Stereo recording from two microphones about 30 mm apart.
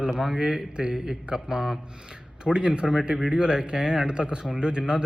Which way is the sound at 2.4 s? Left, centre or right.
Right.